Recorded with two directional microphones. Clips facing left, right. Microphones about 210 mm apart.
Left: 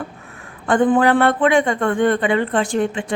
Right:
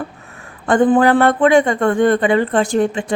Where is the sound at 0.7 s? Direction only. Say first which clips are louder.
Right 3 dB; 40° right (ahead or behind).